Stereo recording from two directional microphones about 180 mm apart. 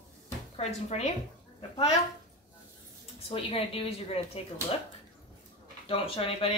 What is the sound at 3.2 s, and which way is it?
Speech, 35° left (ahead or behind).